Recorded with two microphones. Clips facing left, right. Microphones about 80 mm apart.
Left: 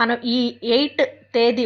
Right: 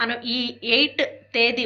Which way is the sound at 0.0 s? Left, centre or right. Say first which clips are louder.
Left 7 dB; left.